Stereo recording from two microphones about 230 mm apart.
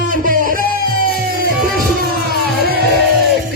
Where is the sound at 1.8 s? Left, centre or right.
Right.